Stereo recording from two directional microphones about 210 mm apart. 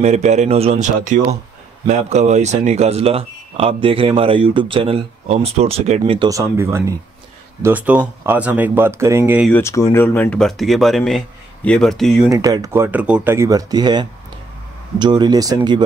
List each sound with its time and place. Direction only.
0.0 s speech: 35° right (ahead or behind); by 9.5 s 10° right (ahead or behind)
9.5 s speech: 15° left (ahead or behind)
12.3 s speech: 15° right (ahead or behind)